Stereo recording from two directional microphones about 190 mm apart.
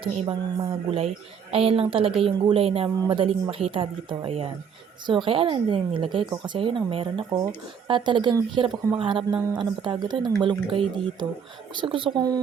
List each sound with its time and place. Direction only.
0.0 s a woman's voice: 30° right (ahead or behind)